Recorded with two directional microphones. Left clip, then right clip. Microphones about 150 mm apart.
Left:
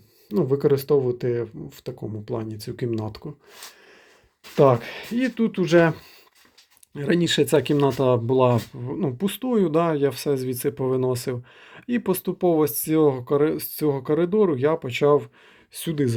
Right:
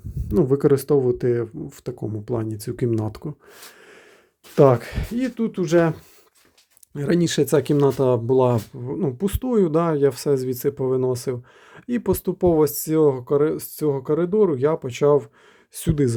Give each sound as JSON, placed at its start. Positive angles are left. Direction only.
{"t": 0.3, "sound": "speech", "side_deg": -50}
{"t": 4.5, "sound": "speech", "side_deg": -40}
{"t": 5.1, "sound": "speech", "side_deg": -15}
{"t": 6.9, "sound": "speech", "side_deg": -25}
{"t": 15.7, "sound": "speech", "side_deg": -35}